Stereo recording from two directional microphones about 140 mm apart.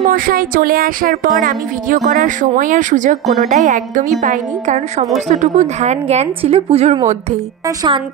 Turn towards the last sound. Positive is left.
turn(degrees=-35)  # may be behind; listen again after turning